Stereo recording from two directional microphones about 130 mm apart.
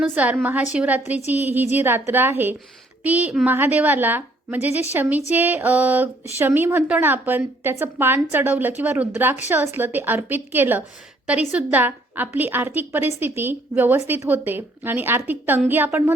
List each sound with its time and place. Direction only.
0.2 s speech: 10° right (ahead or behind)